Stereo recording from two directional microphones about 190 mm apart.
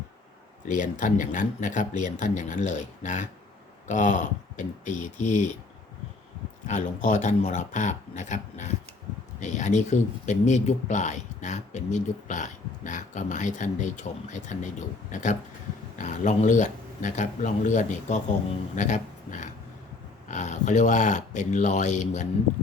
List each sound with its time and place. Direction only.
0.7 s speech: 40° left (ahead or behind)
6.7 s speech: 40° left (ahead or behind)